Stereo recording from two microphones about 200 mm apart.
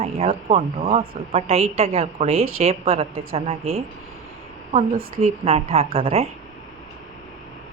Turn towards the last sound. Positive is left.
turn(degrees=-30)  # may be behind; listen again after turning